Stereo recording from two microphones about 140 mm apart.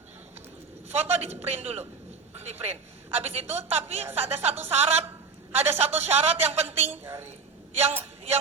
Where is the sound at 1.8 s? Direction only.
15° right (ahead or behind).